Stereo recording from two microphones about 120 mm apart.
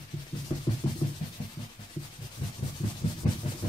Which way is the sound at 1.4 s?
45° left (ahead or behind).